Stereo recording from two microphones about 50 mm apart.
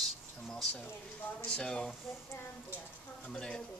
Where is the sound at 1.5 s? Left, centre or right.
Centre.